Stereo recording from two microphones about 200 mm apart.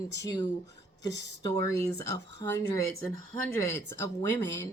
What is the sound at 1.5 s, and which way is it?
Speech, 15° left (ahead or behind).